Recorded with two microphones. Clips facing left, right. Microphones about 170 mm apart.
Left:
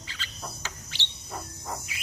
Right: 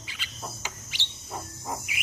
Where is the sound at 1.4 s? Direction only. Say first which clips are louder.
Right 2 dB; 20° right (ahead or behind).